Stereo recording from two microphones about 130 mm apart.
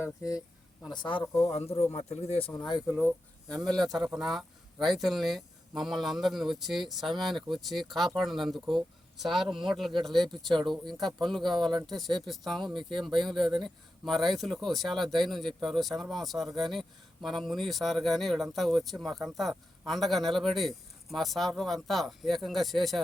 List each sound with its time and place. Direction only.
0.0 s speech: 25° left (ahead or behind)
1.4 s speech: 50° left (ahead or behind)
2.6 s speech: 35° left (ahead or behind)
3.6 s speech: centre (ahead or behind)
12.6 s speech: 40° right (ahead or behind)
13.2 s speech: centre (ahead or behind)